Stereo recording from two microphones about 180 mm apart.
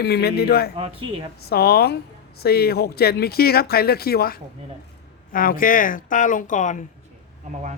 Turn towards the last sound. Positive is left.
turn(degrees=45)  # may be behind; listen again after turning